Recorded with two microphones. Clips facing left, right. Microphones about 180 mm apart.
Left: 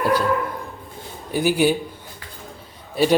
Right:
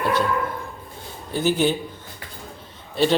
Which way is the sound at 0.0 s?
35° left (ahead or behind).